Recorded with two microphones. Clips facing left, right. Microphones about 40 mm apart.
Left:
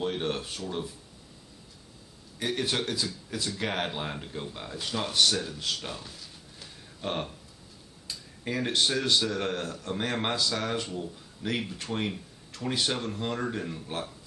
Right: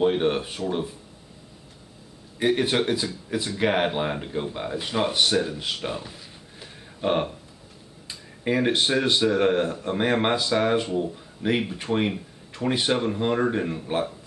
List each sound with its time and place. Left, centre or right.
0.0 s speech: right
2.3 s speech: right
6.6 s a sound: right
8.1 s speech: right